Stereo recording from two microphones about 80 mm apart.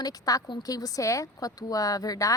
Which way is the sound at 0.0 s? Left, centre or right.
Left.